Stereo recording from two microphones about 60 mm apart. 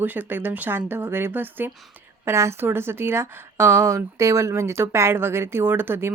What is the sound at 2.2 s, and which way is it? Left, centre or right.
A woman's voice, right.